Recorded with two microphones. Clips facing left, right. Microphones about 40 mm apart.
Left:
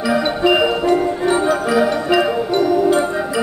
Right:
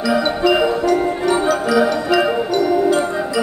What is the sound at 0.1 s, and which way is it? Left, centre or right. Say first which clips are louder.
Music: even; left.